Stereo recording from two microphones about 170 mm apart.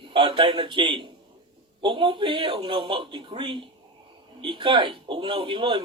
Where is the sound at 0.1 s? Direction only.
30° right (ahead or behind).